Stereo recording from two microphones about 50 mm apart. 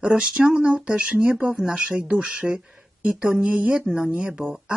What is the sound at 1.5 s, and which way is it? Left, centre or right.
Speech, centre.